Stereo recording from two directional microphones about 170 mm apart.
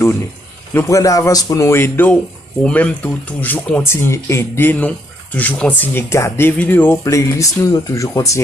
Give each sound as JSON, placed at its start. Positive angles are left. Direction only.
{"t": 0.7, "sound": "speech", "side_deg": 15}